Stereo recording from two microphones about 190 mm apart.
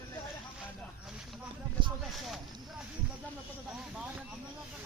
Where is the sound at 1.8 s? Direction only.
25° right (ahead or behind).